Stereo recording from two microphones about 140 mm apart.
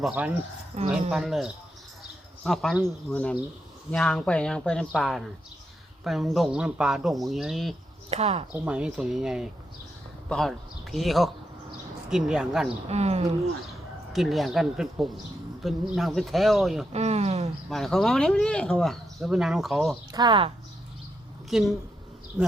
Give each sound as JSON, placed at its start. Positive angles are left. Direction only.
{"t": 0.0, "sound": "speech", "side_deg": -10}
{"t": 0.7, "sound": "speech", "side_deg": -55}
{"t": 1.1, "sound": "speech", "side_deg": -5}
{"t": 8.1, "sound": "speech", "side_deg": -50}
{"t": 8.5, "sound": "speech", "side_deg": -10}
{"t": 12.9, "sound": "speech", "side_deg": -50}
{"t": 14.1, "sound": "speech", "side_deg": 0}
{"t": 16.9, "sound": "speech", "side_deg": -50}
{"t": 17.7, "sound": "speech", "side_deg": 0}
{"t": 20.1, "sound": "speech", "side_deg": -35}
{"t": 21.5, "sound": "speech", "side_deg": -5}